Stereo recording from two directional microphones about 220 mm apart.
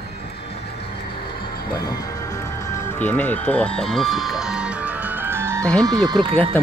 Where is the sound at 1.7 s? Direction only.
15° left (ahead or behind); by 5.7 s 10° right (ahead or behind).